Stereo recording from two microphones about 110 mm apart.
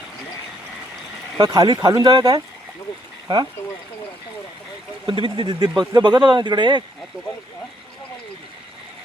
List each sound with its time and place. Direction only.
1.4 s speech: 45° right (ahead or behind)
5.0 s speech: 45° right (ahead or behind)